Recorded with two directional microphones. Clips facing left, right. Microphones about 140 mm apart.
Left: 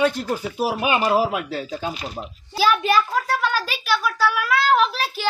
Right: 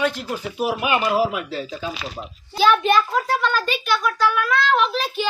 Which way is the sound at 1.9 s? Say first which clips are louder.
Left 1 dB; 90° right.